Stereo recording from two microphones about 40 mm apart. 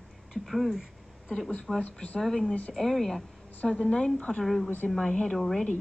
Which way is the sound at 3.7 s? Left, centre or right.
Left.